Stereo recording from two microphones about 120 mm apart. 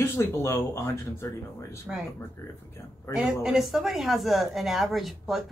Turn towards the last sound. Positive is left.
turn(degrees=0)  # may be behind; listen again after turning